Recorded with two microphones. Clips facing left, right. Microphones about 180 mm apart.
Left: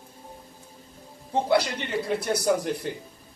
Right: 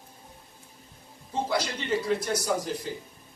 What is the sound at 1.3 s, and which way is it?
A man's voice, 60° left (ahead or behind).